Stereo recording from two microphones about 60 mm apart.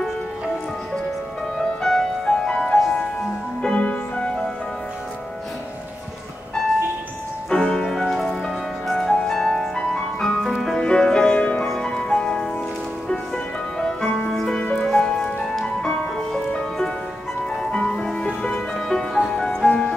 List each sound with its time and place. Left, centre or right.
1.8 s music: centre
3.6 s music: left
7.4 s music: centre
10.8 s music: centre
11.6 s music: centre
13.7 s music: centre
14.6 s music: centre
19.7 s music: centre